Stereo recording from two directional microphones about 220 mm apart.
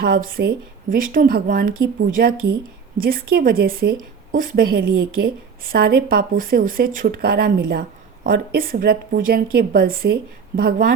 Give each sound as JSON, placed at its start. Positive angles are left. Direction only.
{"t": 0.0, "sound": "a woman's voice", "side_deg": -40}